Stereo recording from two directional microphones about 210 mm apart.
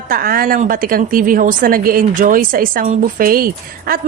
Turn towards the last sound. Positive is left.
turn(degrees=-45)  # may be behind; listen again after turning